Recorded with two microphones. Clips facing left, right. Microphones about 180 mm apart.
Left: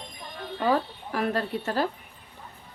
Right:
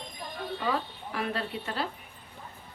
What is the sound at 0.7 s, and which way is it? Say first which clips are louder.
Speech: left 8 dB; 45° left (ahead or behind).